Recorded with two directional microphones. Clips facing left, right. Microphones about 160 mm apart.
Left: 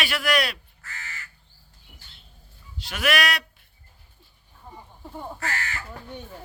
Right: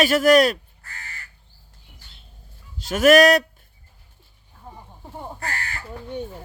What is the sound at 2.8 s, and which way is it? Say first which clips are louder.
Speech: right 12 dB; 45° right (ahead or behind).